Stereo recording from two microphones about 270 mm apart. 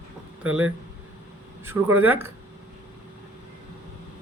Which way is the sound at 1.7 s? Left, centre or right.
Centre.